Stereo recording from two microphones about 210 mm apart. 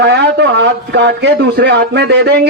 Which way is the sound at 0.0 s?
55° right (ahead or behind).